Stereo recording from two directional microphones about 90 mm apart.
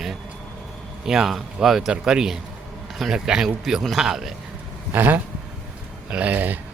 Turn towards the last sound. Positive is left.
turn(degrees=-20)  # may be behind; listen again after turning